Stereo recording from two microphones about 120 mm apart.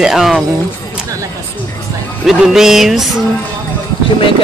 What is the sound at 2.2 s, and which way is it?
Speech, 5° right (ahead or behind).